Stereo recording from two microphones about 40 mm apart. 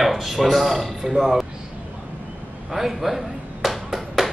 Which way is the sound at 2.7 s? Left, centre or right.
Centre.